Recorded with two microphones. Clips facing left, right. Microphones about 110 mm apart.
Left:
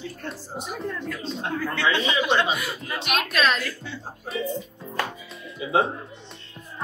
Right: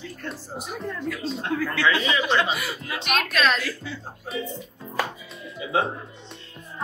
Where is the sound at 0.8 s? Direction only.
Centre (ahead or behind).